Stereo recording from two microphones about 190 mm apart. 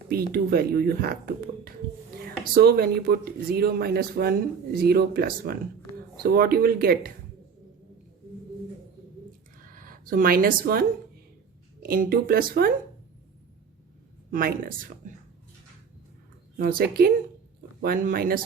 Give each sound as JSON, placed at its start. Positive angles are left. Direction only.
{"t": 0.1, "sound": "speech", "side_deg": -55}
{"t": 9.7, "sound": "speech", "side_deg": -45}
{"t": 14.3, "sound": "speech", "side_deg": -45}
{"t": 16.6, "sound": "speech", "side_deg": -50}